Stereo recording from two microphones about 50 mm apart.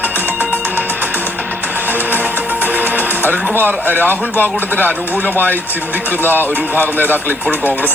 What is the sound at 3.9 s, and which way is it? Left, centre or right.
Speech, right.